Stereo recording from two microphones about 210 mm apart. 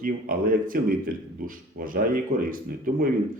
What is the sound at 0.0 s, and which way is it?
A man's voice, 40° right (ahead or behind).